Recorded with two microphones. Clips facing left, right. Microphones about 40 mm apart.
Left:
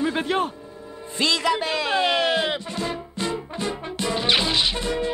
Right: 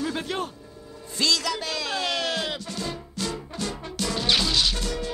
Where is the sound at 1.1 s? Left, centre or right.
Left.